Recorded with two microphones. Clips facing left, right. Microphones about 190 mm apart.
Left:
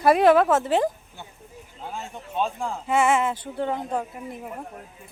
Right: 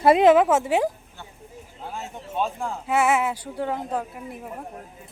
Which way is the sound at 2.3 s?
5° right (ahead or behind).